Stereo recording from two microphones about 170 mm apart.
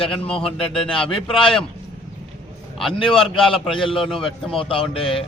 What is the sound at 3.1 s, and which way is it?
Speech, 30° left (ahead or behind).